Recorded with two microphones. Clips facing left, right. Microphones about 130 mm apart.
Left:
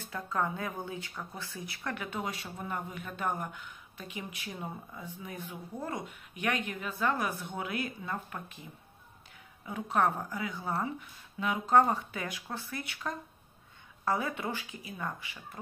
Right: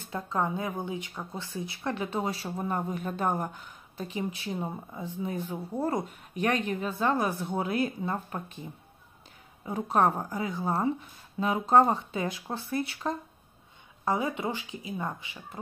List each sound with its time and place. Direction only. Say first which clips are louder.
0.1 s a woman's voice: right 3 dB; 25° right (ahead or behind)
9.7 s a woman's voice: right 4 dB; 35° right (ahead or behind)
14.0 s speech: right 3 dB; 20° right (ahead or behind)